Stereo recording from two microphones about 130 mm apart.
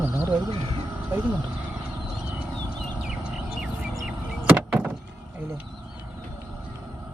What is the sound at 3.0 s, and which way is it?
Bird, 5° right (ahead or behind).